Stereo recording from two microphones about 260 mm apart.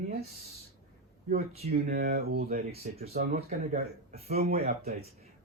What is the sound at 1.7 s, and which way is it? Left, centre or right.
Speech, right.